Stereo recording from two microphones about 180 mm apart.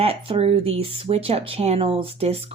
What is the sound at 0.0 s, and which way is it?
Speech, 30° right (ahead or behind).